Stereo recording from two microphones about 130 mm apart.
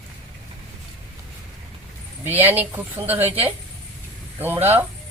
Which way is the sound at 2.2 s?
15° right (ahead or behind).